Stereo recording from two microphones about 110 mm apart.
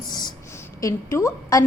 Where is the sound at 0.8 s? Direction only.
25° left (ahead or behind).